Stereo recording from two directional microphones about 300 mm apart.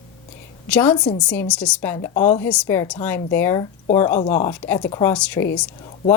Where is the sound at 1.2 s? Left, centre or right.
Centre.